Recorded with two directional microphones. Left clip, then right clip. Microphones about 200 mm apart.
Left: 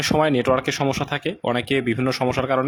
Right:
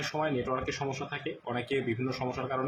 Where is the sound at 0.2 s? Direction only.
55° left (ahead or behind).